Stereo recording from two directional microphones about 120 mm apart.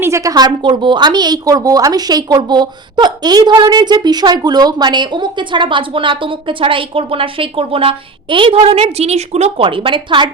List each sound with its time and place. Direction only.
0.0 s a woman's voice: 25° right (ahead or behind); by 9.6 s 60° right (ahead or behind)
9.6 s a woman's voice: 45° right (ahead or behind)